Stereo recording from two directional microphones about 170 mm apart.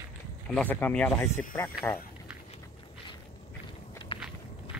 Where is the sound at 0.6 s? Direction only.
10° left (ahead or behind).